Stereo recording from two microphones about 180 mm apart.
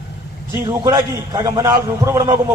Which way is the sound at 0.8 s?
20° right (ahead or behind).